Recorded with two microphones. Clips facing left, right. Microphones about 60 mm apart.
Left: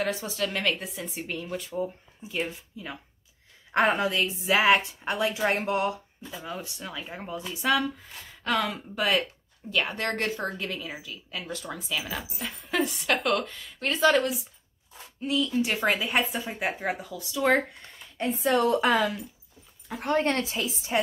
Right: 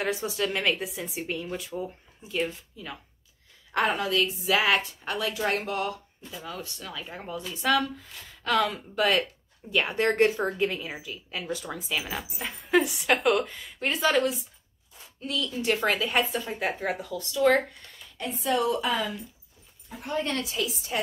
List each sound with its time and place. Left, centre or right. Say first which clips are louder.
0.0 s speech: right 1 dB; centre
3.7 s a woman's voice: left 2 dB; left; by 9.2 s centre
9.7 s a woman's voice: right 3 dB; centre
18.7 s a woman's voice: left 4 dB; left
20.2 s a woman's voice: left 2 dB; left